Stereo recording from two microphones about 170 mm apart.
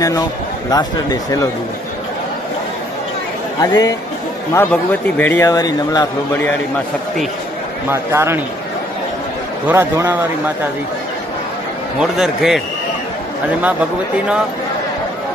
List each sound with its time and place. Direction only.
0.7 s speech: 20° left (ahead or behind)
3.6 s speech: 20° left (ahead or behind)
5.1 s speech: 10° left (ahead or behind)
7.9 s a man's voice: 15° right (ahead or behind)
9.7 s a man's voice: 10° right (ahead or behind)
12.0 s a man's voice: centre (ahead or behind)